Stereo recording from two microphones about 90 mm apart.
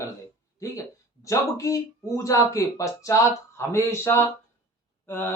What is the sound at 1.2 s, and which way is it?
Speech, 35° left (ahead or behind).